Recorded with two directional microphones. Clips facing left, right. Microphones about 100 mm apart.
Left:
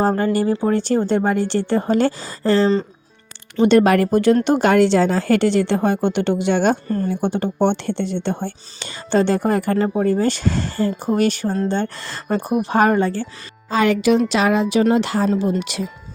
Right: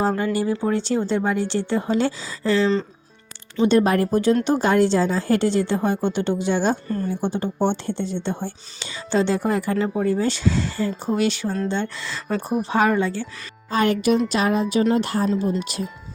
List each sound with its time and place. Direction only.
0.7 s a woman's voice: 50° left (ahead or behind)
3.6 s a woman's voice: 75° left (ahead or behind)
6.8 s a woman's voice: 45° left (ahead or behind)
7.1 s a woman's voice: 70° left (ahead or behind); by 12.4 s 50° left (ahead or behind)
12.4 s speech: 15° left (ahead or behind)
12.6 s a woman's voice: 50° left (ahead or behind)
13.7 s speech: 90° left